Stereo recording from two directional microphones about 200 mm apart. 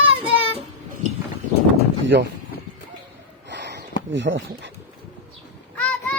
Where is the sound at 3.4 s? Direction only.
60° right (ahead or behind).